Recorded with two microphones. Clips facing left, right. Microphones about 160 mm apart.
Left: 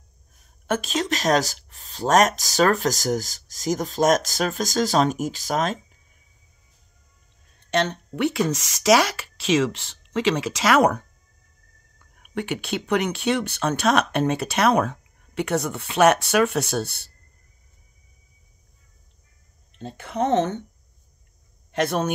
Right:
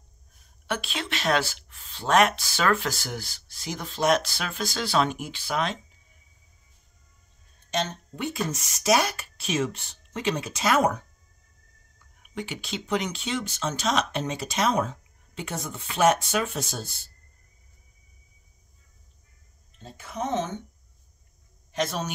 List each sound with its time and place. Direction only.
0.7 s speech: 40° left (ahead or behind)
7.7 s speech: 65° left (ahead or behind)
12.0 s speech: 60° left (ahead or behind)
19.8 s speech: 65° left (ahead or behind)
21.7 s speech: 60° left (ahead or behind)